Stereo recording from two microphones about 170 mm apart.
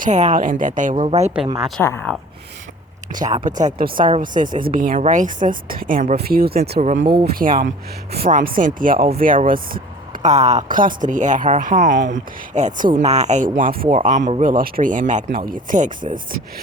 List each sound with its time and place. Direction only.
0.0 s speech: 45° right (ahead or behind)
1.5 s speech: centre (ahead or behind)
1.8 s speech: 15° left (ahead or behind)
3.2 s a woman's voice: 50° right (ahead or behind); by 6.8 s 65° right (ahead or behind)
6.8 s speech: 45° right (ahead or behind)
7.3 s a woman's voice: 55° right (ahead or behind)